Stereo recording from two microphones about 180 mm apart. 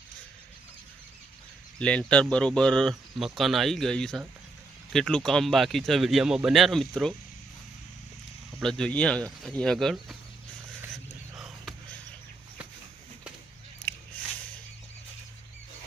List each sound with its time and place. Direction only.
1.8 s speech: 5° left (ahead or behind)
8.6 s speech: 5° left (ahead or behind)
10.9 s a sound: centre (ahead or behind)